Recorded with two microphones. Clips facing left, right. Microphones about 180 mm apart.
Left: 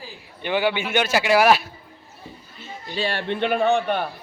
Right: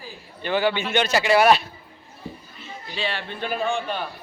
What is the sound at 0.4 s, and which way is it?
A man's voice, 15° left (ahead or behind).